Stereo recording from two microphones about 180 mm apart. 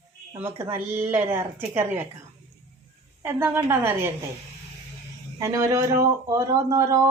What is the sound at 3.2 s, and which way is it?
Speech, 10° right (ahead or behind).